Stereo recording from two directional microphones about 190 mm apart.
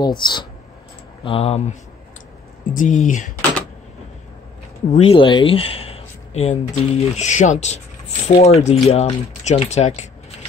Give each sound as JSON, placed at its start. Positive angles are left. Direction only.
{"t": 0.0, "sound": "speech", "side_deg": 25}
{"t": 4.9, "sound": "speech", "side_deg": 30}